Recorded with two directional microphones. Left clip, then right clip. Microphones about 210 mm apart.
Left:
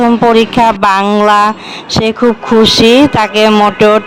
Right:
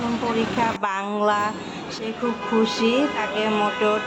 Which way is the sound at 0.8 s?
55° left (ahead or behind).